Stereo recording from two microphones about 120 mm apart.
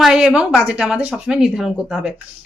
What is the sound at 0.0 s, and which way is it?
Speech, 5° right (ahead or behind).